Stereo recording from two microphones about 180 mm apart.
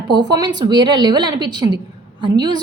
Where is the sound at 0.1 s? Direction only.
25° right (ahead or behind).